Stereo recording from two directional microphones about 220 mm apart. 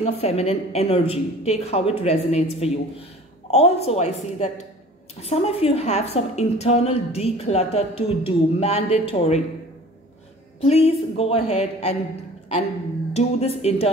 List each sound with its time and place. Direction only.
0.0 s a woman's voice: 30° left (ahead or behind)
10.6 s a woman's voice: 25° left (ahead or behind)
13.1 s a woman's voice: 30° left (ahead or behind)